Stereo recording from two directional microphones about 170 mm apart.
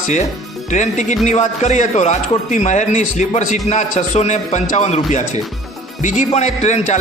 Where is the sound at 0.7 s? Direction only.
45° left (ahead or behind).